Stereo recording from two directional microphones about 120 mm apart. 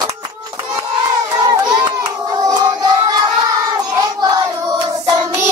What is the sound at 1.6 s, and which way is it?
Hands, 40° right (ahead or behind).